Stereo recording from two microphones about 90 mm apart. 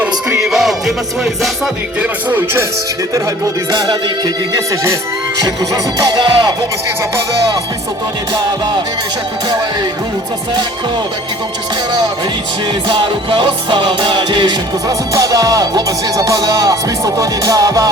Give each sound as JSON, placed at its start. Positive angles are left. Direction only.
{"t": 0.0, "sound": "music", "side_deg": -10}
{"t": 2.0, "sound": "music", "side_deg": -25}
{"t": 3.4, "sound": "music", "side_deg": -50}
{"t": 4.5, "sound": "music", "side_deg": -35}
{"t": 12.9, "sound": "music", "side_deg": -65}
{"t": 15.1, "sound": "music", "side_deg": -40}